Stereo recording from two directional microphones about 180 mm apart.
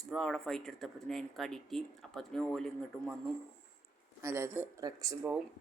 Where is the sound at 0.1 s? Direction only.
Centre (ahead or behind).